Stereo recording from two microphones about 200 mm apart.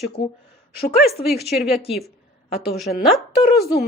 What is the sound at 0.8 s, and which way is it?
Speech, 50° left (ahead or behind).